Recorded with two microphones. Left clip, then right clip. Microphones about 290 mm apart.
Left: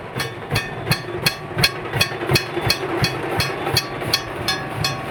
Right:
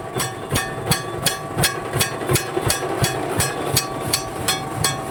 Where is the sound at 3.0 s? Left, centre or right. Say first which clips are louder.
Even; right.